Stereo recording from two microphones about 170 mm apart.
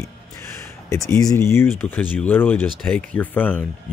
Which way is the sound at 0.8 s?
15° left (ahead or behind).